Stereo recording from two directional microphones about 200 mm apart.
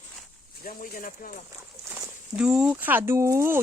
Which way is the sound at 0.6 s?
45° left (ahead or behind).